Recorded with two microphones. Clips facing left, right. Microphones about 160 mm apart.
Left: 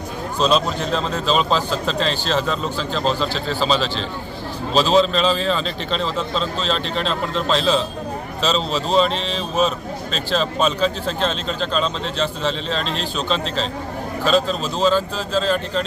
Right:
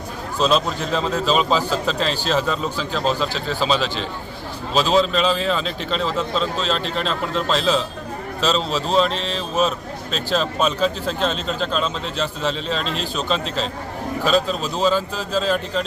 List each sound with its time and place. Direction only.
0.3 s speech: 5° right (ahead or behind)